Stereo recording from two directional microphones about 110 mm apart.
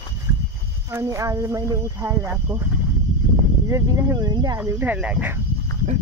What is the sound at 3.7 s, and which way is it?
Speech, 25° right (ahead or behind).